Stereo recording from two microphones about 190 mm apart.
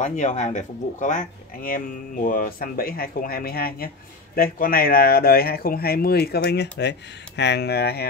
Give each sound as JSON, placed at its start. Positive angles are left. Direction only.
{"t": 0.0, "sound": "speech", "side_deg": 40}